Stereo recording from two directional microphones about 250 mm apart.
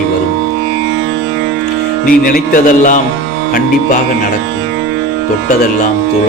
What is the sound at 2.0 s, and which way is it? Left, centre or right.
Speech, left.